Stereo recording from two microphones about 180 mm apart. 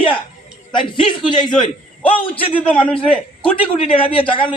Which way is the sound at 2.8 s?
5° left (ahead or behind).